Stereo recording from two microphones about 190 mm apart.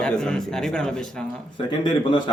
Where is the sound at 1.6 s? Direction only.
25° left (ahead or behind).